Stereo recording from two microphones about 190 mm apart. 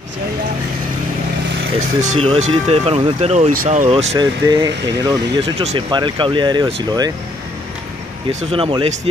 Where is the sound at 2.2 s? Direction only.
30° right (ahead or behind).